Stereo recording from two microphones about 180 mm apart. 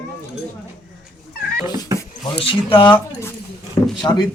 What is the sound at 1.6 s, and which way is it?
Speech, 20° right (ahead or behind).